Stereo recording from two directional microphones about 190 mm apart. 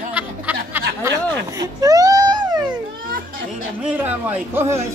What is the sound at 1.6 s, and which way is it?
Baby cry, 20° right (ahead or behind).